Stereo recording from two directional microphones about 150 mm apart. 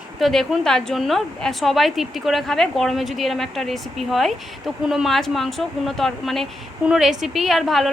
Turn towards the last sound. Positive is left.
turn(degrees=0)  # may be behind; listen again after turning